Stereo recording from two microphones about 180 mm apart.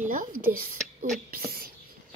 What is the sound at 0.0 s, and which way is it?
Speech, 45° right (ahead or behind).